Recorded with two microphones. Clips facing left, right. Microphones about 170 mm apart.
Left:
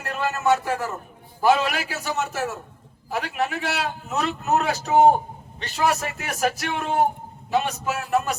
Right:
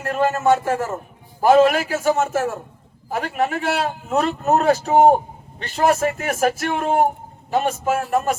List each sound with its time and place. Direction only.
0.0 s a man's voice: 50° right (ahead or behind)